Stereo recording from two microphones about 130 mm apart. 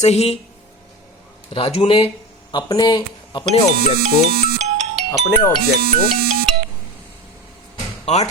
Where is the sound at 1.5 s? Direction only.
45° left (ahead or behind).